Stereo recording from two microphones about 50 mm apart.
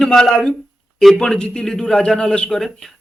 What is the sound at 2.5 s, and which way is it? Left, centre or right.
Speech, centre.